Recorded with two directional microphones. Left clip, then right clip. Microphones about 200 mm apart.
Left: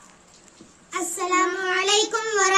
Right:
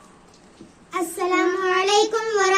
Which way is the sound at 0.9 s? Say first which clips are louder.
Right 1 dB; 10° left (ahead or behind).